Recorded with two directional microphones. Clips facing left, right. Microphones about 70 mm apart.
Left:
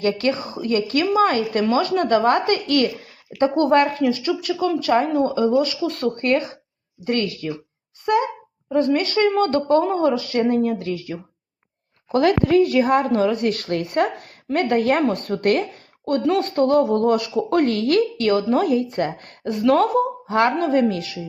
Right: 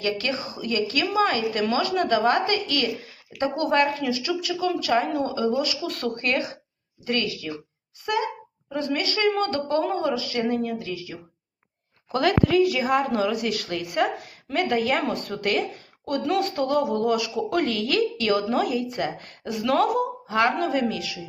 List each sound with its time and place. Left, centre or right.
0.0 s a woman's voice: left
12.0 s a woman's voice: left